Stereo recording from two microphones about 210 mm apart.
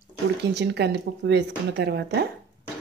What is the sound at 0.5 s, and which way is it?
A woman's voice, 55° right (ahead or behind).